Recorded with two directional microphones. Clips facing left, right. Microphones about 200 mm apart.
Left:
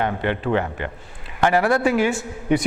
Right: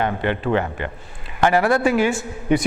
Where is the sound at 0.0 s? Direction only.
15° right (ahead or behind).